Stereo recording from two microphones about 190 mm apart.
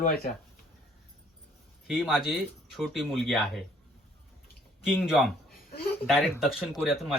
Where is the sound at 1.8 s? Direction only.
Centre (ahead or behind).